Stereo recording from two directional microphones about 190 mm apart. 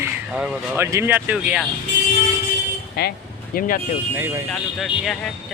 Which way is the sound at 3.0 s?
55° left (ahead or behind).